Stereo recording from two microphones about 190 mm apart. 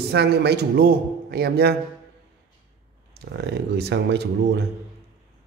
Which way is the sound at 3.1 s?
60° right (ahead or behind).